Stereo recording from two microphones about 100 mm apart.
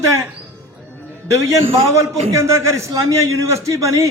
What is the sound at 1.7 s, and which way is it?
A man's voice, 30° right (ahead or behind).